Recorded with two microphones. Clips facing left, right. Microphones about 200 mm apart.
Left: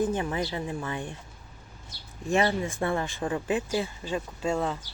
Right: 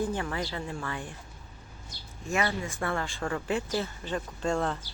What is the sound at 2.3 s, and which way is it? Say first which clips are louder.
Speech: left 5 dB; 30° left (ahead or behind).